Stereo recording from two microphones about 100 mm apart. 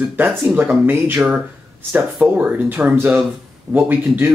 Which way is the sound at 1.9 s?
15° right (ahead or behind).